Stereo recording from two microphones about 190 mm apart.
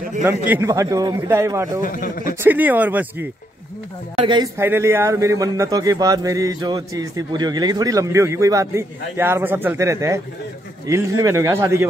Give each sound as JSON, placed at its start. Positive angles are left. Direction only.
{"t": 0.5, "sound": "speech", "side_deg": -15}
{"t": 1.8, "sound": "speech", "side_deg": 45}
{"t": 2.4, "sound": "speech", "side_deg": -10}
{"t": 4.2, "sound": "speech", "side_deg": -25}
{"t": 4.6, "sound": "speech", "side_deg": -15}